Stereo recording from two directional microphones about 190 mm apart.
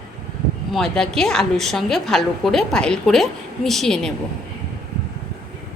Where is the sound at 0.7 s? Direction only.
5° left (ahead or behind).